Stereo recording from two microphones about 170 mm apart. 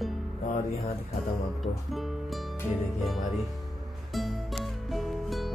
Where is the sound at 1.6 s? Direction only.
Centre (ahead or behind).